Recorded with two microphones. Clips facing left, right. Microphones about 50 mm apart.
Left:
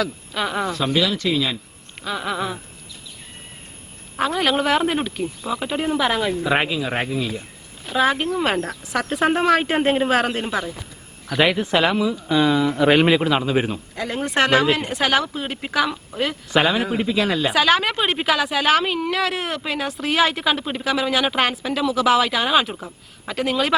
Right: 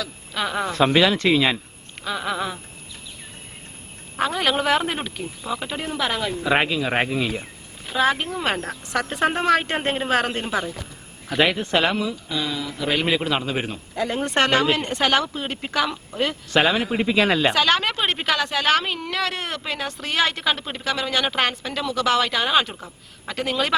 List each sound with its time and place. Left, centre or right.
0.3 s a woman's voice: centre
0.7 s speech: right
2.0 s a woman's voice: centre
4.2 s a woman's voice: centre
6.9 s speech: centre
7.9 s a woman's voice: centre
12.1 s speech: left
13.1 s a woman's voice: centre
17.5 s a woman's voice: centre